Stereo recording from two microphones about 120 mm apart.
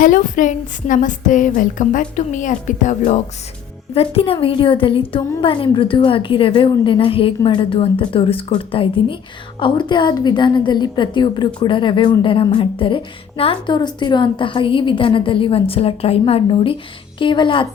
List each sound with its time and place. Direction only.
0.0 s a woman's voice: 90° left
3.9 s a woman's voice: 50° left (ahead or behind)